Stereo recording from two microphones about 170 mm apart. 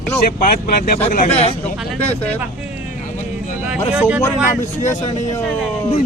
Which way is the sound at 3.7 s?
10° right (ahead or behind).